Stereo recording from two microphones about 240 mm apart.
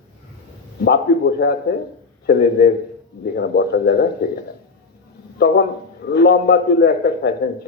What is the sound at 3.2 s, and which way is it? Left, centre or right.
Speech, left.